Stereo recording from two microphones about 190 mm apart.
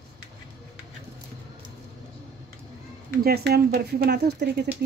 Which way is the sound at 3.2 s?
55° right (ahead or behind).